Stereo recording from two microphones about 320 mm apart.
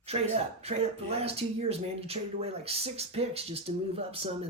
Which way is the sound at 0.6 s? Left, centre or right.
Centre.